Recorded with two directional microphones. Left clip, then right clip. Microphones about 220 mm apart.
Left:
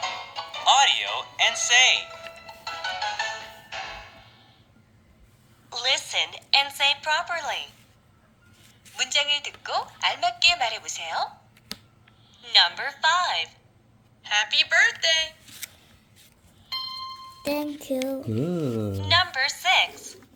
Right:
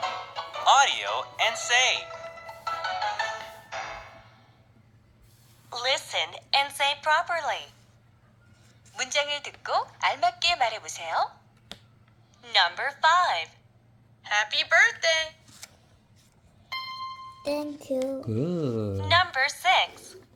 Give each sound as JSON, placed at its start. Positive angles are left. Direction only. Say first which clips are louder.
{"t": 0.0, "sound": "music", "louder": "even", "side_deg": -25}
{"t": 5.7, "sound": "a woman's voice", "louder": "left 2 dB", "side_deg": -25}
{"t": 9.0, "sound": "a woman's voice", "louder": "left 4 dB", "side_deg": -30}
{"t": 12.4, "sound": "a woman's voice", "louder": "left 3 dB", "side_deg": -30}
{"t": 16.8, "sound": "music", "louder": "left 2 dB", "side_deg": 75}
{"t": 17.5, "sound": "a sound", "louder": "left 1 dB", "side_deg": 10}
{"t": 18.0, "sound": "speech", "louder": "left 1 dB", "side_deg": 20}
{"t": 18.3, "sound": "a sound", "louder": "left 1 dB", "side_deg": 0}
{"t": 18.9, "sound": "speech", "louder": "left 1 dB", "side_deg": -30}